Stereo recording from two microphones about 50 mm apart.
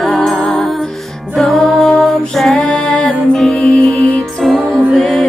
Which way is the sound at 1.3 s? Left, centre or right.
Centre.